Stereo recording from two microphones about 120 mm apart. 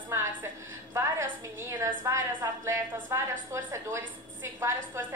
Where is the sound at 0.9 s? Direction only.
25° right (ahead or behind).